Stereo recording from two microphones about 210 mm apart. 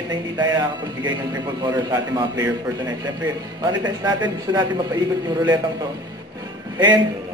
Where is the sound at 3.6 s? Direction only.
20° right (ahead or behind).